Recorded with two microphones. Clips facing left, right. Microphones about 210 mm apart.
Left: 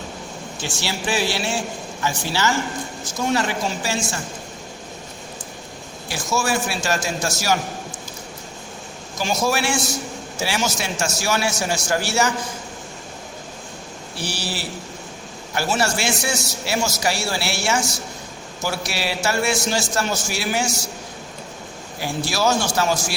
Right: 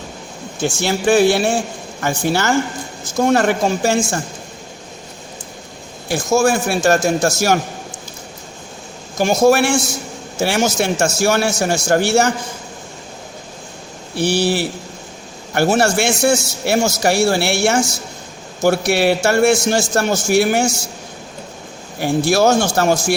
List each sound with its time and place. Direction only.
0.6 s speech: 50° right (ahead or behind)
6.1 s speech: 45° right (ahead or behind)
9.1 s speech: 55° right (ahead or behind)
14.2 s a man's voice: 60° right (ahead or behind)
22.0 s speech: 55° right (ahead or behind)